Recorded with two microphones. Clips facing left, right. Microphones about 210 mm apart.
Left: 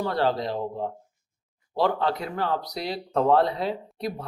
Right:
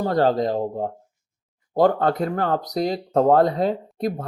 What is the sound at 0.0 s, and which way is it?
Speech, 45° right (ahead or behind).